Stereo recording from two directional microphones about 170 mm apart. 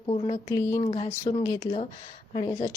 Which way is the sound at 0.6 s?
15° left (ahead or behind).